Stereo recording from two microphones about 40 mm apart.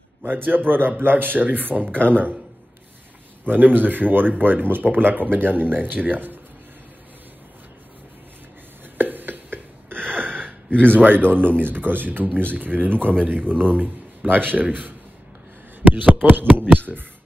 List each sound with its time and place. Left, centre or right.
0.2 s speech: right
3.4 s speech: right
8.9 s a sound: right
10.4 s speech: right